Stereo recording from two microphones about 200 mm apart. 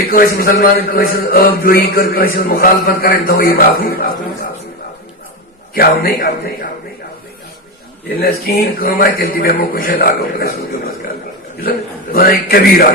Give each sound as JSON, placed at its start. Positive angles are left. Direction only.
{"t": 0.1, "sound": "speech", "side_deg": 45}
{"t": 5.7, "sound": "speech", "side_deg": 50}
{"t": 8.2, "sound": "speech", "side_deg": 50}
{"t": 12.1, "sound": "speech", "side_deg": 50}